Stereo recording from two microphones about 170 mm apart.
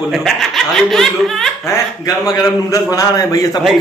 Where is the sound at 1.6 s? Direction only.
20° left (ahead or behind).